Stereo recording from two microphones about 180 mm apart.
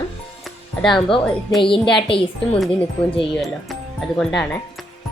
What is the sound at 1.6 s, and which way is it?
Speech, 30° left (ahead or behind).